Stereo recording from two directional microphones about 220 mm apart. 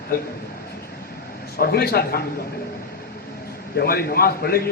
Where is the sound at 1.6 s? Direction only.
45° left (ahead or behind).